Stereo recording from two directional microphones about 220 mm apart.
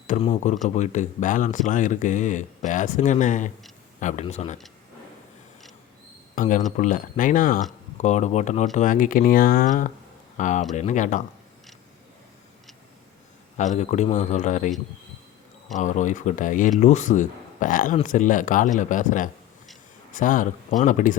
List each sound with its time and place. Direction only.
0.1 s speech: 30° left (ahead or behind)
6.3 s speech: 35° left (ahead or behind)
13.6 s speech: 30° left (ahead or behind)
15.7 s speech: 35° left (ahead or behind)